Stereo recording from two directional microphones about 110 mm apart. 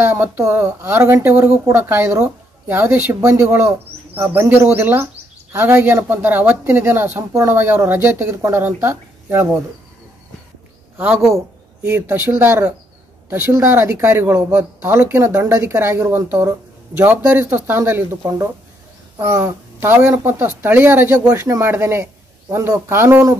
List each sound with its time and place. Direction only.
0.0 s speech: 25° right (ahead or behind)
3.2 s speech: 30° right (ahead or behind)
11.0 s a woman's voice: 15° right (ahead or behind)